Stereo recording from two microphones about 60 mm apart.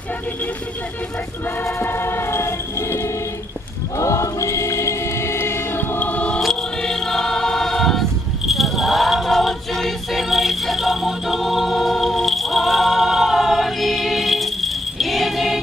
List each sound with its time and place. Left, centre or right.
1.8 s a sound: left
4.0 s choir: left
5.9 s choir: left
6.4 s choir: centre